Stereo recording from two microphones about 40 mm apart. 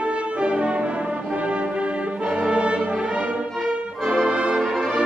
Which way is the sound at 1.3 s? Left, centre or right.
Right.